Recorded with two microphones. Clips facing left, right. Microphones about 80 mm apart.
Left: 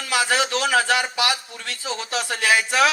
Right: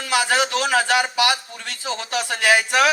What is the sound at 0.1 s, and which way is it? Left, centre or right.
A man's voice, right.